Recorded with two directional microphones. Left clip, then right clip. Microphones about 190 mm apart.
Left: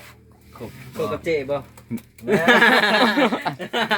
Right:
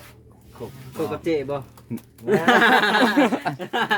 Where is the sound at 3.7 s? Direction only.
65° right (ahead or behind).